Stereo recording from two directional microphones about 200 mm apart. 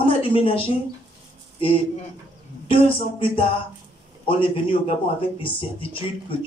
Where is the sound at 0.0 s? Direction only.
25° left (ahead or behind).